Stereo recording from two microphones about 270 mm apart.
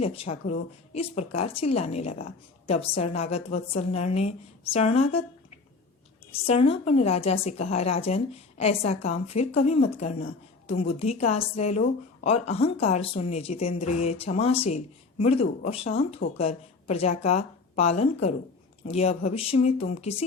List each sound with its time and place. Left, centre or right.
0.0 s a woman's voice: left